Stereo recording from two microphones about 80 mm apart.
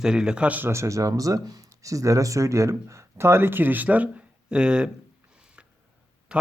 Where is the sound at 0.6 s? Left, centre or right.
Right; by 4.9 s centre.